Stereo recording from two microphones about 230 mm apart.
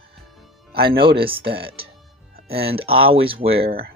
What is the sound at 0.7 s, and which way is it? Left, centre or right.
Speech, right.